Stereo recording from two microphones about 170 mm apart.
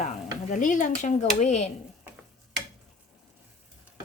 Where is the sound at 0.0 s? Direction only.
45° left (ahead or behind).